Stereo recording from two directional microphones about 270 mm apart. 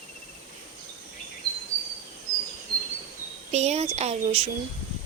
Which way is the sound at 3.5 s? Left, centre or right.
Right.